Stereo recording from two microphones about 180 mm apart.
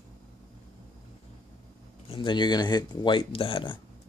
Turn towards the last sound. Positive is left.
turn(degrees=30)  # may be behind; listen again after turning